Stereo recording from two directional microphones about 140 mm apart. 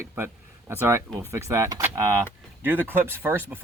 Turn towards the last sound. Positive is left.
turn(degrees=-15)  # may be behind; listen again after turning